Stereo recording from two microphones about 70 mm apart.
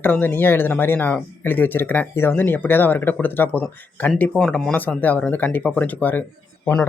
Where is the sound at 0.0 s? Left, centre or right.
Left.